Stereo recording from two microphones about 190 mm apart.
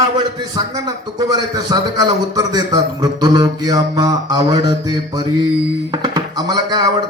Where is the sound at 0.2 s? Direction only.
20° right (ahead or behind).